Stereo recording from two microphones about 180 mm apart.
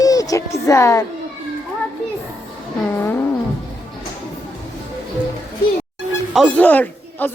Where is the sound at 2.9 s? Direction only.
10° left (ahead or behind).